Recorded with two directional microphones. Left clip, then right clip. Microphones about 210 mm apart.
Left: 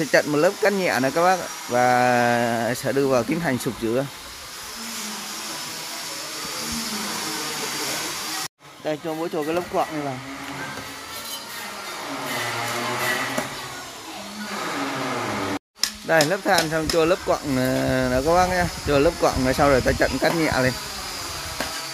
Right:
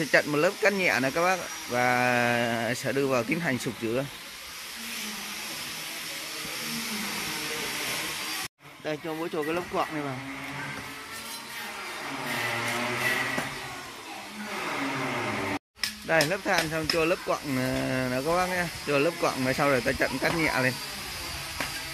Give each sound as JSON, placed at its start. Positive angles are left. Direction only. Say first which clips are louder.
{"t": 0.0, "sound": "speech", "louder": "left 5 dB", "side_deg": 15}
{"t": 8.8, "sound": "speech", "louder": "left 6 dB", "side_deg": 15}
{"t": 16.1, "sound": "speech", "louder": "left 6 dB", "side_deg": 15}